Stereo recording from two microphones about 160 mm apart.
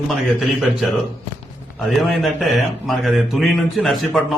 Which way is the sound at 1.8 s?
Centre (ahead or behind).